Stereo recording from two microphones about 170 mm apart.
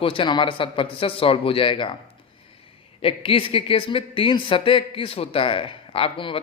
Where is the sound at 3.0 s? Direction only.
30° left (ahead or behind).